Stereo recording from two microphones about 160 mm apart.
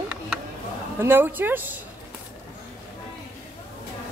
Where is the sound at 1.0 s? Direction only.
15° right (ahead or behind).